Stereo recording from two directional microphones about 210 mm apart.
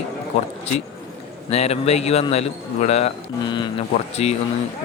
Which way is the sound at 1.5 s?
30° left (ahead or behind).